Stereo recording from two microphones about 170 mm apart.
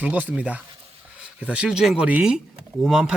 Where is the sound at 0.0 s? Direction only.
10° right (ahead or behind).